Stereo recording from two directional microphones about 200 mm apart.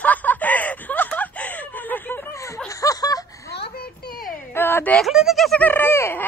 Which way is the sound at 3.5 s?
55° left (ahead or behind).